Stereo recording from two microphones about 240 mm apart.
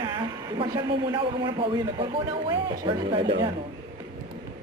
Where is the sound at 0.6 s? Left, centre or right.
Centre.